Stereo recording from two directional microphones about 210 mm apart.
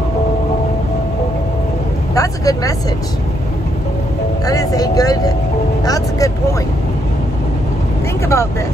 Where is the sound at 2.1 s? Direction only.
15° left (ahead or behind).